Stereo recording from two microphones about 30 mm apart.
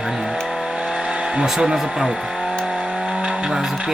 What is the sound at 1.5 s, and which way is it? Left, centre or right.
Speech, centre.